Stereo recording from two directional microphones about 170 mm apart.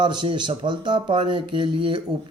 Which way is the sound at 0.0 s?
25° right (ahead or behind).